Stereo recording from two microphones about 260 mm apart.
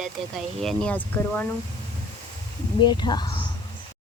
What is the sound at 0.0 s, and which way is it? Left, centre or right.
Speech, centre.